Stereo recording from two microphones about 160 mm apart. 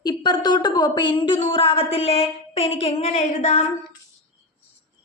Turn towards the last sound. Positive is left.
turn(degrees=45)  # may be behind; listen again after turning